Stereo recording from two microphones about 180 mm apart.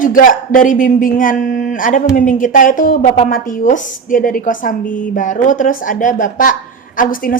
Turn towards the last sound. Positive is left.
turn(degrees=50)  # may be behind; listen again after turning